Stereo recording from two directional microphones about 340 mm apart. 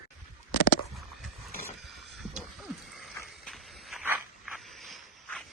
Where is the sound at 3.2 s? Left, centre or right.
Centre.